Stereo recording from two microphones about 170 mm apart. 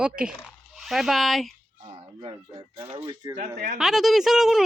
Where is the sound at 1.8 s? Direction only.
35° right (ahead or behind).